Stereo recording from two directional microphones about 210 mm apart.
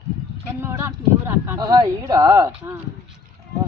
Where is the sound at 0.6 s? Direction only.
10° right (ahead or behind).